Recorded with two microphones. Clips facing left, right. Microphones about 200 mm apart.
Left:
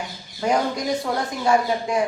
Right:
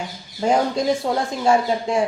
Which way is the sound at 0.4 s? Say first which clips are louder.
Right 3 dB; 25° right (ahead or behind).